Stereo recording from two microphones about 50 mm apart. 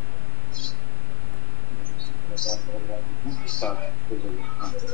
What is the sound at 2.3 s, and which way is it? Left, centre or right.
A man's voice, centre.